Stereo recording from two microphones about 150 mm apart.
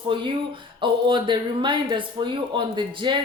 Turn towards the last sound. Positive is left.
turn(degrees=-35)  # may be behind; listen again after turning